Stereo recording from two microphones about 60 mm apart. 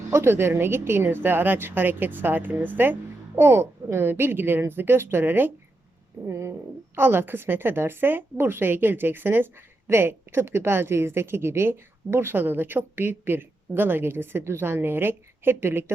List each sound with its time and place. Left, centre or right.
0.1 s a woman's voice: right
6.2 s a sound: right
6.9 s a woman's voice: right